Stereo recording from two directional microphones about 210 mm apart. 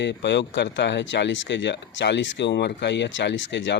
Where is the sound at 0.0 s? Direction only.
55° left (ahead or behind).